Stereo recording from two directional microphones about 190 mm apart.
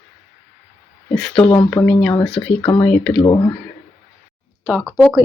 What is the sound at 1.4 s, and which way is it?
Speech, 25° left (ahead or behind).